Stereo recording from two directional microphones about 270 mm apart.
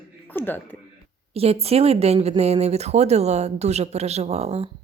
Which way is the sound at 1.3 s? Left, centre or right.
Right.